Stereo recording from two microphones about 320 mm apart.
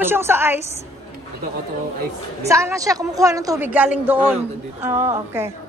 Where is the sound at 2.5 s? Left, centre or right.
Centre.